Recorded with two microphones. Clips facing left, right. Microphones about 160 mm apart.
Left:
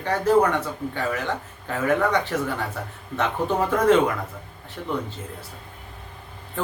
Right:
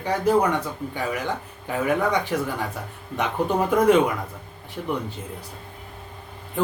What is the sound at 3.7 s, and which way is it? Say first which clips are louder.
Speech: right 1 dB; 10° right (ahead or behind).